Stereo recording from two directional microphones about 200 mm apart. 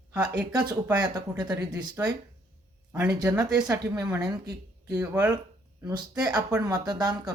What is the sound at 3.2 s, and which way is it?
A woman's voice, 20° right (ahead or behind).